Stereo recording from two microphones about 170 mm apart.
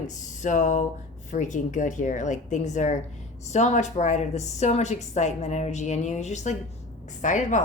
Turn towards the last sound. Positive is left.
turn(degrees=45)  # may be behind; listen again after turning